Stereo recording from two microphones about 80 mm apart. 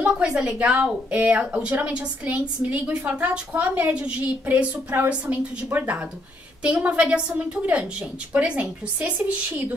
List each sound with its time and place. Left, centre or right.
0.0 s a woman's voice: centre